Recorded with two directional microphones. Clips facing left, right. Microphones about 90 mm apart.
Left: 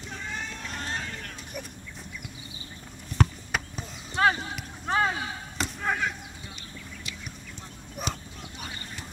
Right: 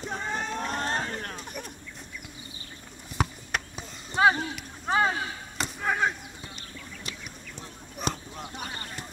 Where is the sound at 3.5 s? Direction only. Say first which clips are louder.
Left 1 dB; 5° right (ahead or behind).